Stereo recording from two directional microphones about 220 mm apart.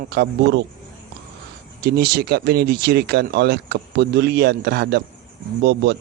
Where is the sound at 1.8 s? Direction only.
45° right (ahead or behind).